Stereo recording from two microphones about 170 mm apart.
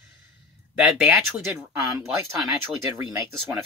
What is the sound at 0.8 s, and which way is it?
Speech, 5° right (ahead or behind).